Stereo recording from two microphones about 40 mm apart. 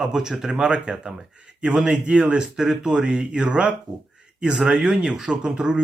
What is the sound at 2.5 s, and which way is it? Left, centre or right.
Speech, centre.